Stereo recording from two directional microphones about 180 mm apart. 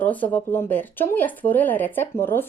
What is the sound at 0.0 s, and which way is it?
Speech, 10° left (ahead or behind).